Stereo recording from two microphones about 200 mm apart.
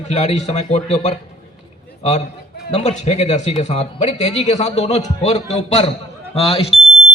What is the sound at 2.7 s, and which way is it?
A man's voice, 35° left (ahead or behind).